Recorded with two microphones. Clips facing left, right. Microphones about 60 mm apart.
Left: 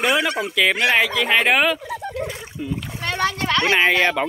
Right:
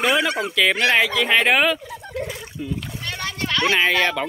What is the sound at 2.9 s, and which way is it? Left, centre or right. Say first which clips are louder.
Splash: left 6 dB; left.